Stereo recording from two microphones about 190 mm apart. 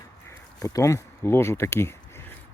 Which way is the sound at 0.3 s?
15° left (ahead or behind).